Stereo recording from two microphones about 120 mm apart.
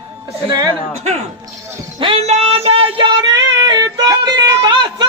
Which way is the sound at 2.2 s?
60° right (ahead or behind).